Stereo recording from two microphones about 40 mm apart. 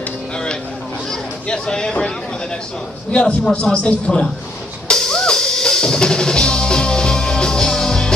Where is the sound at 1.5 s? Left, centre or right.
Centre.